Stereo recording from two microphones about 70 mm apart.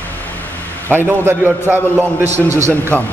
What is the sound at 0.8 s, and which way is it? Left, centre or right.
A man's voice, right.